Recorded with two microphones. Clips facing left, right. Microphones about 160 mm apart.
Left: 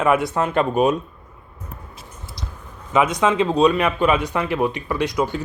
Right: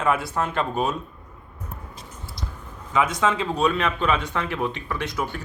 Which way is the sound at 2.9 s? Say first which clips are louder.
Left 4 dB; 20° left (ahead or behind).